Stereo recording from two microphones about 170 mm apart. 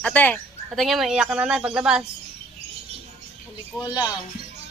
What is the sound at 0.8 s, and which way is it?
Speech, centre (ahead or behind).